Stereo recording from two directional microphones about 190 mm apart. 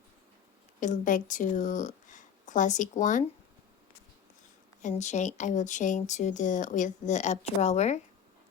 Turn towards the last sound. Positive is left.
turn(degrees=35)  # may be behind; listen again after turning